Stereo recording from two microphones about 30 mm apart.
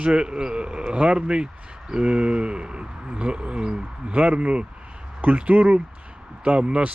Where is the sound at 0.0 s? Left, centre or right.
Right.